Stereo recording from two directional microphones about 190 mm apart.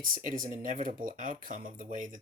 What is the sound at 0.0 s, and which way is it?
Speech, 45° right (ahead or behind).